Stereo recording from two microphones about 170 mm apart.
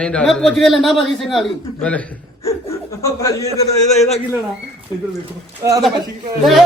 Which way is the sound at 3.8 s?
40° left (ahead or behind).